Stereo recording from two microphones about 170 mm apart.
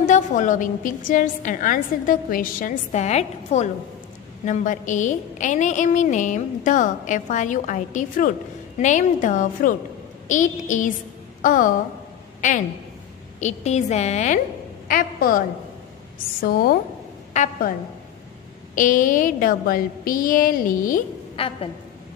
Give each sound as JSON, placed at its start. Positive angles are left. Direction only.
{"t": 0.0, "sound": "a woman's voice", "side_deg": 45}
{"t": 14.9, "sound": "a woman's voice", "side_deg": 55}
{"t": 17.3, "sound": "a woman's voice", "side_deg": 50}
{"t": 18.8, "sound": "a woman's voice", "side_deg": 50}
{"t": 21.4, "sound": "a woman's voice", "side_deg": 35}